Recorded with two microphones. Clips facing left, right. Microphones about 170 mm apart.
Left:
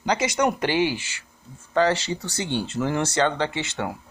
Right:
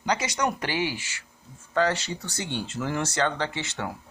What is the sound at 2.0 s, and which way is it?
Speech, 85° left.